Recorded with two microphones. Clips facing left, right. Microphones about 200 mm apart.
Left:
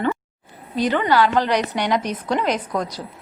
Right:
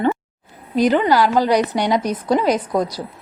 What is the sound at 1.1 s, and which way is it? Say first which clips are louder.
A woman's voice: right 3 dB; 10° right (ahead or behind).